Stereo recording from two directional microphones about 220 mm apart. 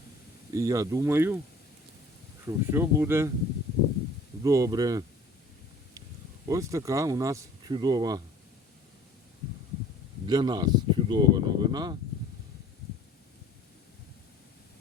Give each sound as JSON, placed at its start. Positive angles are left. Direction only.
{"t": 0.5, "sound": "speech", "side_deg": -15}
{"t": 2.4, "sound": "speech", "side_deg": -10}
{"t": 4.4, "sound": "speech", "side_deg": -15}
{"t": 6.5, "sound": "speech", "side_deg": -15}
{"t": 10.2, "sound": "speech", "side_deg": -20}